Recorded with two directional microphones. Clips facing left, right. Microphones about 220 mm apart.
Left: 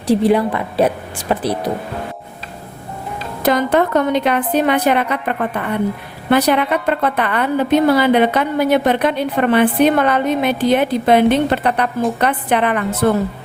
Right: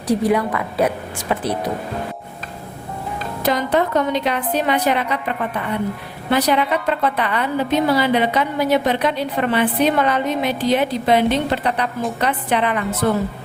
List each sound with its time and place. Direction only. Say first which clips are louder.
0.1 s a woman's voice: left 4 dB; 30° left (ahead or behind)
3.4 s a woman's voice: left 4 dB; 50° left (ahead or behind)